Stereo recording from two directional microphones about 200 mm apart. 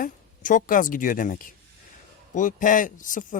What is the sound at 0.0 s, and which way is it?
A woman's voice, 40° left (ahead or behind).